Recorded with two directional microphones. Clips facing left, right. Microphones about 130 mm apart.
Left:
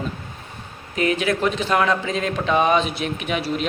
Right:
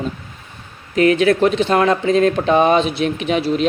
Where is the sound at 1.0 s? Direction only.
40° right (ahead or behind).